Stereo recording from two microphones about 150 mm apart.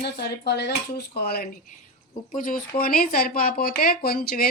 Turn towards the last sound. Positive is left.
turn(degrees=90)